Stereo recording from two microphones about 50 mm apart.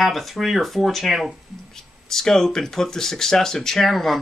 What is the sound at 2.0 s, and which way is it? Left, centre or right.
Speech, centre.